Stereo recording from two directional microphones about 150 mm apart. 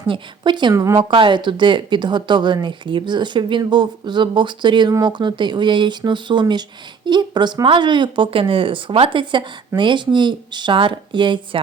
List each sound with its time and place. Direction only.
0.1 s speech: 30° right (ahead or behind)